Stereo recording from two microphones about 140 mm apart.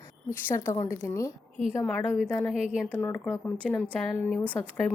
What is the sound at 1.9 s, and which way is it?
Speech, 5° left (ahead or behind).